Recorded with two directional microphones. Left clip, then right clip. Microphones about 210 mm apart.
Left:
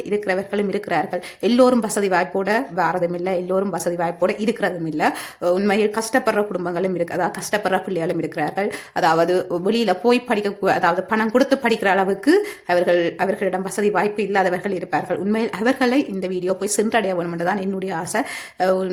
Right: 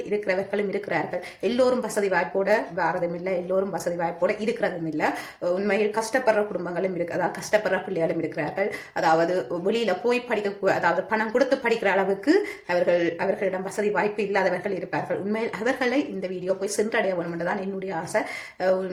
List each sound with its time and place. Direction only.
0.1 s speech: 45° left (ahead or behind)